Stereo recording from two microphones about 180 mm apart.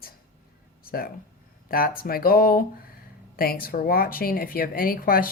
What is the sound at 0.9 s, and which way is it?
Speech, 55° left (ahead or behind).